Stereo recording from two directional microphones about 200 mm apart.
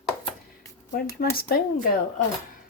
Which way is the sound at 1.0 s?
50° left (ahead or behind).